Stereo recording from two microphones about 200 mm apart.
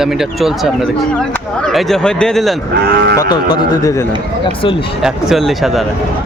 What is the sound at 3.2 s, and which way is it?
Speech, 20° left (ahead or behind).